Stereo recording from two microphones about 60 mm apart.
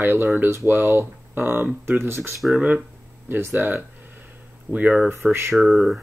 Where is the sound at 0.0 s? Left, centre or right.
Right.